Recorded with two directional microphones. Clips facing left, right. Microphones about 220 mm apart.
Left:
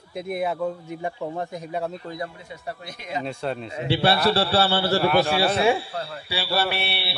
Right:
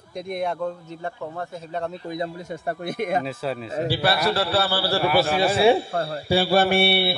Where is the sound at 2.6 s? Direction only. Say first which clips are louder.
Right 9 dB; 55° right (ahead or behind).